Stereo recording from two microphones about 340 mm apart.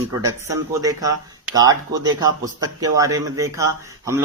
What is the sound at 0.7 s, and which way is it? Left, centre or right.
Speech, centre.